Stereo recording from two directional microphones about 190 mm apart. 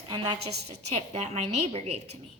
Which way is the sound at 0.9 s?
35° right (ahead or behind).